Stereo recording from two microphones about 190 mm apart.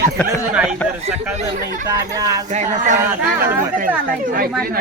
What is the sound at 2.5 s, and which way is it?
Speech, 40° right (ahead or behind).